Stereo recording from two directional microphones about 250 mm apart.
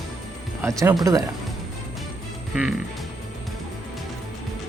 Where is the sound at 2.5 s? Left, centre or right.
Centre.